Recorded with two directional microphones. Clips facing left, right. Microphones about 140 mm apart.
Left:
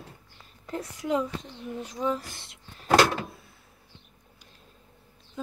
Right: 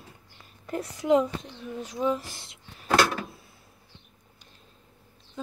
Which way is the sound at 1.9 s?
5° right (ahead or behind).